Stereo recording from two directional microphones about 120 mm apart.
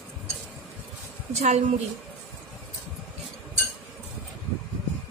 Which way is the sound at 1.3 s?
65° right (ahead or behind).